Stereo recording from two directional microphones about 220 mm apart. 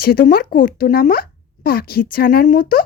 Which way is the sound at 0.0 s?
45° left (ahead or behind).